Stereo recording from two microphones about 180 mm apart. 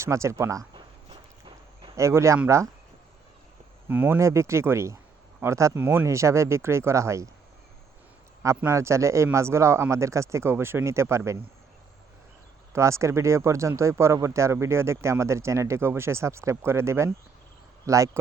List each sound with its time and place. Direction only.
0.0 s speech: 15° right (ahead or behind)
2.0 s speech: 15° right (ahead or behind)
3.8 s speech: 10° right (ahead or behind)
8.4 s speech: 15° right (ahead or behind)
12.7 s speech: 15° right (ahead or behind)